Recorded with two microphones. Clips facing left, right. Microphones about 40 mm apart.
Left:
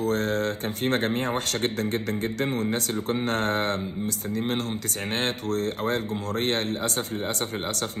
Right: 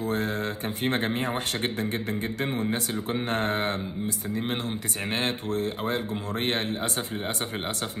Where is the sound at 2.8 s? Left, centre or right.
Left.